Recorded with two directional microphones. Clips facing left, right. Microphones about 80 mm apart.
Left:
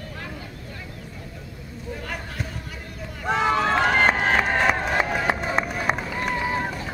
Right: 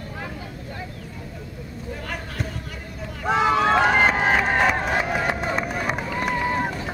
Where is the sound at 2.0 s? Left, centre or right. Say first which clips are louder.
Right 2 dB; centre.